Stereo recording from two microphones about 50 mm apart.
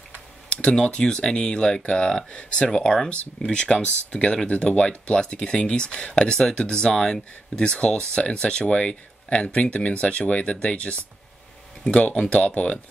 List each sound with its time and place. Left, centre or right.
0.5 s speech: centre
3.1 s speech: left
12.3 s speech: left